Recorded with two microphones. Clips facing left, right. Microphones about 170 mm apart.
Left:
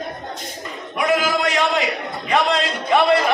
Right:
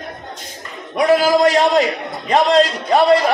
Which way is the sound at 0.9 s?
35° right (ahead or behind).